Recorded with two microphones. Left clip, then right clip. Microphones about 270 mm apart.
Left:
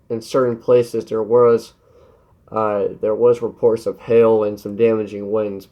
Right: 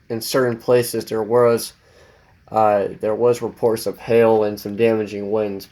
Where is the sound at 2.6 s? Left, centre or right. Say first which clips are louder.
Right 2 dB; right.